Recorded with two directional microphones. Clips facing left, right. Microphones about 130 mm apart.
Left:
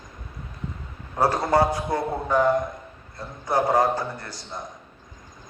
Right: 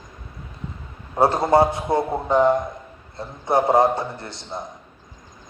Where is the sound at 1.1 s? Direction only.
25° right (ahead or behind).